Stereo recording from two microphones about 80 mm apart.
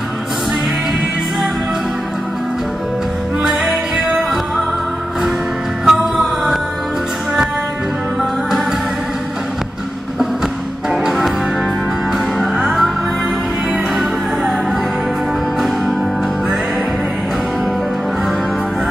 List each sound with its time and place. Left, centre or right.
3.4 s music: centre
5.9 s music: centre
8.2 s music: centre
10.9 s music: centre